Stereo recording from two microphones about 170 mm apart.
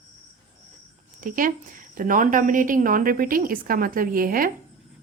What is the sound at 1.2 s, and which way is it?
A woman's voice, 55° right (ahead or behind).